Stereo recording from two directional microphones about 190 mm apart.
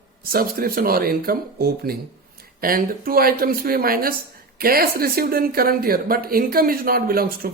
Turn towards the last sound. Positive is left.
turn(degrees=-50)  # may be behind; listen again after turning